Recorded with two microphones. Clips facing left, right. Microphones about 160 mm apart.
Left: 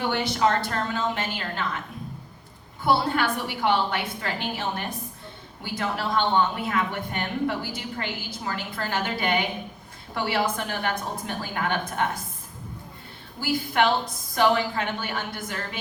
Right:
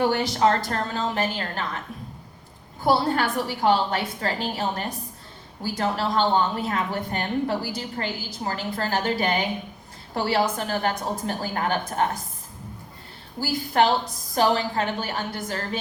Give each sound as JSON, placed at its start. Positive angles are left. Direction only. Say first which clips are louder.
{"t": 0.1, "sound": "a woman's voice", "louder": "right 2 dB", "side_deg": -40}
{"t": 2.8, "sound": "a woman's voice", "louder": "right 1 dB", "side_deg": -40}
{"t": 5.6, "sound": "a woman's voice", "louder": "right 3 dB", "side_deg": -35}
{"t": 13.4, "sound": "a woman's voice", "louder": "right 2 dB", "side_deg": -35}